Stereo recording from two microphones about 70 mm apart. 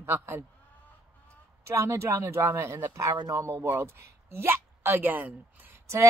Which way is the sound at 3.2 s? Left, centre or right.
Right.